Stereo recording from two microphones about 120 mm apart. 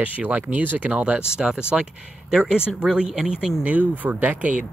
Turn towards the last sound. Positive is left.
turn(degrees=-10)  # may be behind; listen again after turning